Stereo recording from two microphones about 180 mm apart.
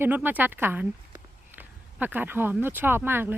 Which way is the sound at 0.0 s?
10° right (ahead or behind).